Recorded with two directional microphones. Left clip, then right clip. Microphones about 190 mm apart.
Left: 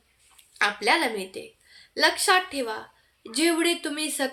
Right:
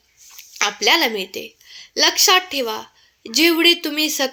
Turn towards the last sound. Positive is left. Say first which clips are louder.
# right 8 dB
turn(degrees=-35)  # may be behind; listen again after turning